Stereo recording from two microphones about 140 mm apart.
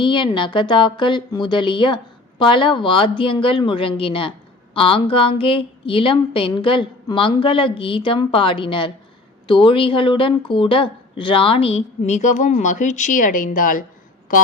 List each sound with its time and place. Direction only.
0.0 s speech: 35° left (ahead or behind); by 14.4 s 70° left (ahead or behind)